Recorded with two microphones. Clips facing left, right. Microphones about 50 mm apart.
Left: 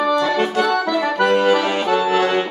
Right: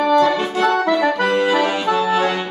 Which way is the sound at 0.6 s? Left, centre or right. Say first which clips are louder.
Right 2 dB; right.